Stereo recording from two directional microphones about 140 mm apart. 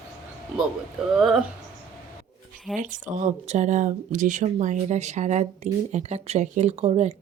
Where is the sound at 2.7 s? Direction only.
65° right (ahead or behind).